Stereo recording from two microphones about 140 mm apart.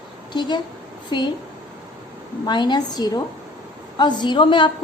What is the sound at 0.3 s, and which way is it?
Speech, 30° left (ahead or behind).